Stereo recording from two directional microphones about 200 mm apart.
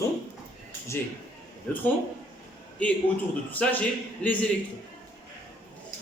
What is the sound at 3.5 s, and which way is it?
Speech, 5° left (ahead or behind).